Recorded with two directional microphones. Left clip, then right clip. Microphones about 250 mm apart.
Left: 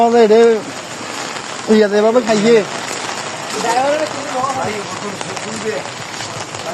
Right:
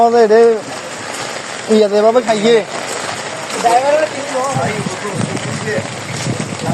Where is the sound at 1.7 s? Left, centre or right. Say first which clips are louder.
Right 2 dB; centre.